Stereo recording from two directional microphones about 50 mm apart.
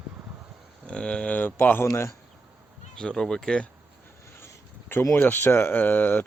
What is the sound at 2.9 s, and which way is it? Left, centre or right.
Speech, centre.